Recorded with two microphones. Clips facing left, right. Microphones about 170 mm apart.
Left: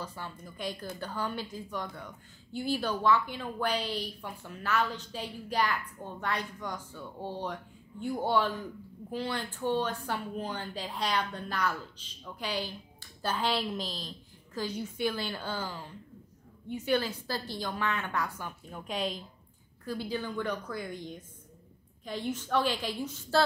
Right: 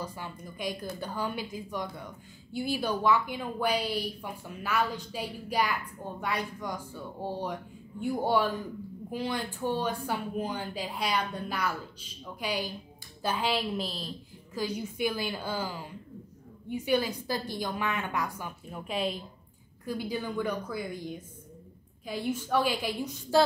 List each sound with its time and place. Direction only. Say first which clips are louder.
0.0 s a woman's voice: right 2 dB; 15° right (ahead or behind)